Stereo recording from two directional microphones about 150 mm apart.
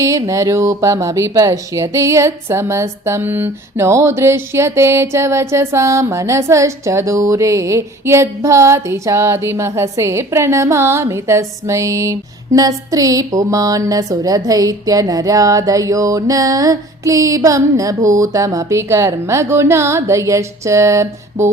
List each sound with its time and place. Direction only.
0.0 s speech: 20° right (ahead or behind)